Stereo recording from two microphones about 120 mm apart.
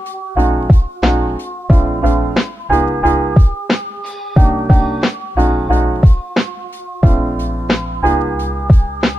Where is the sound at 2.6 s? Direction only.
20° right (ahead or behind).